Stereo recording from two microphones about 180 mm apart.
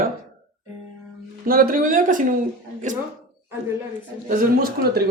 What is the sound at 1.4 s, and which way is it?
Speech, 55° right (ahead or behind).